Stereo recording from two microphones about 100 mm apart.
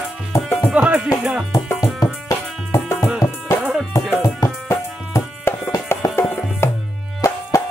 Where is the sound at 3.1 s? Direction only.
10° right (ahead or behind).